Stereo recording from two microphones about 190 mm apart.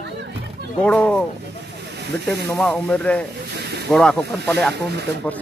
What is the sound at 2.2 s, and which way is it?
Speech, 5° left (ahead or behind).